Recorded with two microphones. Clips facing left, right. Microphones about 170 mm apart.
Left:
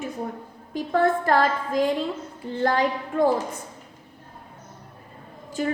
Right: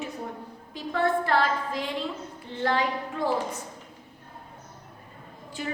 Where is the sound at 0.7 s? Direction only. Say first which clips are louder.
Left 4 dB; 45° left (ahead or behind).